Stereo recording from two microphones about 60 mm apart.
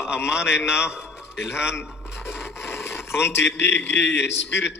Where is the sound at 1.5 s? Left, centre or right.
Left.